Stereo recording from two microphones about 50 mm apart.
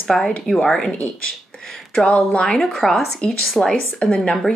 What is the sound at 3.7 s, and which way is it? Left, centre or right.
Speech, centre.